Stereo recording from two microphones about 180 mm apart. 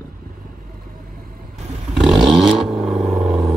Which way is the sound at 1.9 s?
Centre (ahead or behind).